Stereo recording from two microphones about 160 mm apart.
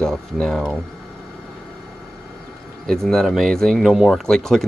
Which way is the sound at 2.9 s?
5° left (ahead or behind).